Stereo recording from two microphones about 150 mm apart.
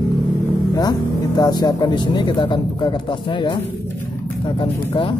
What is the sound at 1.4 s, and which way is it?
Speech, 25° left (ahead or behind).